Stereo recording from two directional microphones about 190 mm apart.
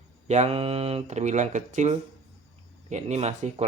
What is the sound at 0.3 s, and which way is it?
Speech, 35° right (ahead or behind).